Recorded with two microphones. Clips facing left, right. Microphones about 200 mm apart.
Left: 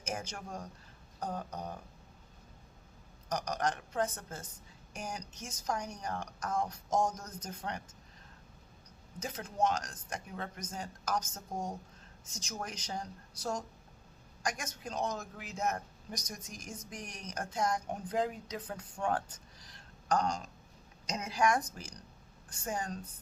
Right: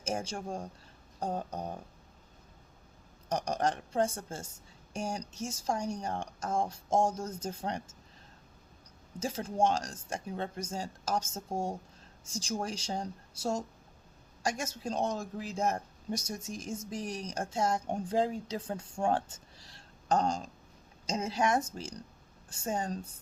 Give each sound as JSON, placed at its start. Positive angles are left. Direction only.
{"t": 0.0, "sound": "speech", "side_deg": -30}
{"t": 3.2, "sound": "speech", "side_deg": -30}
{"t": 9.1, "sound": "speech", "side_deg": -30}